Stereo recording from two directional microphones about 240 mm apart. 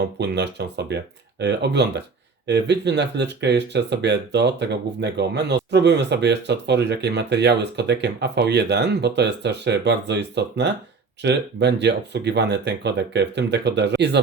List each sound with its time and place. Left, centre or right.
0.2 s speech: right